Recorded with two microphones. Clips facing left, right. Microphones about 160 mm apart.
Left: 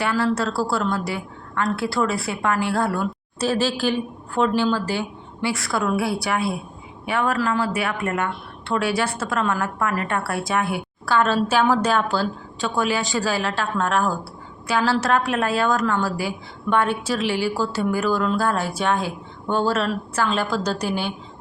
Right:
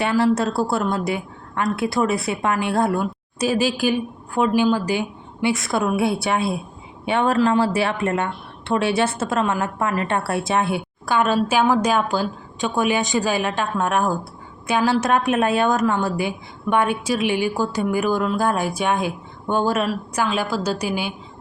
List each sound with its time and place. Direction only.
0.0 s a woman's voice: 20° right (ahead or behind)